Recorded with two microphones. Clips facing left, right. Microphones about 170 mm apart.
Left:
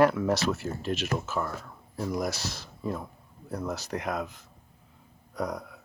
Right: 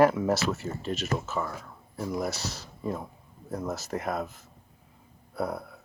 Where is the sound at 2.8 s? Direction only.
10° right (ahead or behind).